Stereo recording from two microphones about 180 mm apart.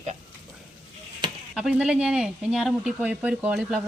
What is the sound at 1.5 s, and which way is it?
Speech, 5° right (ahead or behind).